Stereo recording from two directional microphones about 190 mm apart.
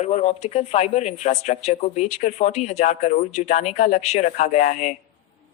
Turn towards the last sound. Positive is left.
turn(degrees=45)  # may be behind; listen again after turning